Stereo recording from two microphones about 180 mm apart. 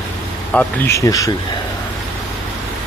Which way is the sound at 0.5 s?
10° left (ahead or behind).